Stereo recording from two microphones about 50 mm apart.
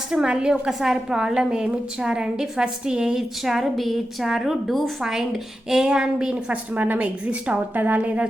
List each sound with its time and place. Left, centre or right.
0.1 s a woman's voice: centre
3.4 s a woman's voice: centre; by 7.6 s right
7.7 s speech: right